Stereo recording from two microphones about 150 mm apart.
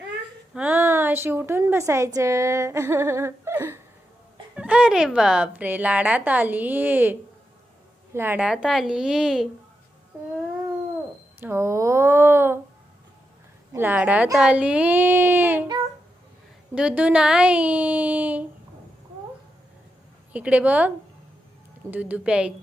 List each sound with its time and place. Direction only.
0.5 s a woman's voice: 10° right (ahead or behind)
11.3 s a woman's voice: 15° right (ahead or behind)
13.7 s a woman's voice: 10° right (ahead or behind)
16.7 s a woman's voice: 10° right (ahead or behind)
20.3 s a woman's voice: 10° right (ahead or behind)